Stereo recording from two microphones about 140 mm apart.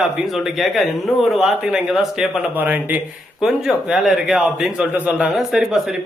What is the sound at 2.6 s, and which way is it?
A man's voice, 15° right (ahead or behind).